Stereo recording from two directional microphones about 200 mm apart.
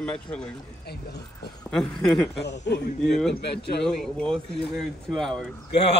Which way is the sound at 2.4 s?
60° left (ahead or behind).